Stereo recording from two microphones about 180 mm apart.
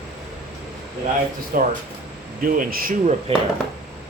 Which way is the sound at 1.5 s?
50° right (ahead or behind).